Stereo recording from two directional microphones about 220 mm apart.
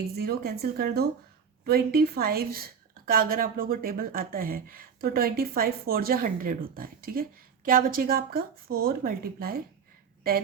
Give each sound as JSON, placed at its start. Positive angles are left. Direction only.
{"t": 0.2, "sound": "speech", "side_deg": -45}